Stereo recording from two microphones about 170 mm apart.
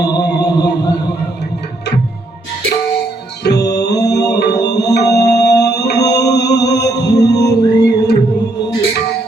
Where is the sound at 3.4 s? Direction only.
80° left.